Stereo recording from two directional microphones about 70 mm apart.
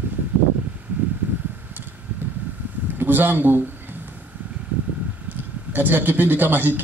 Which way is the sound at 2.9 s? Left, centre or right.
Right.